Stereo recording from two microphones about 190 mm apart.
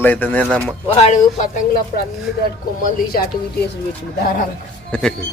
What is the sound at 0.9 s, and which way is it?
Speech, 35° left (ahead or behind).